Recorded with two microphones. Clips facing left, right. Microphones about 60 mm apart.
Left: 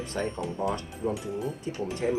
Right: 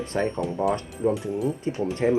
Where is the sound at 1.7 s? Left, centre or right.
Right.